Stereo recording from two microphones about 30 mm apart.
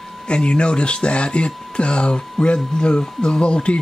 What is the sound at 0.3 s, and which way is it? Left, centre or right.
Speech, left.